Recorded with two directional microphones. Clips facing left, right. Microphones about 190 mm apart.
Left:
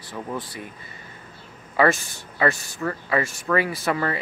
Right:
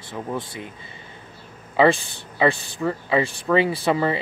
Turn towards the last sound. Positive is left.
turn(degrees=-20)  # may be behind; listen again after turning